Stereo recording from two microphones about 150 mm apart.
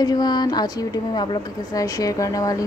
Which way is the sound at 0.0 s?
25° left (ahead or behind).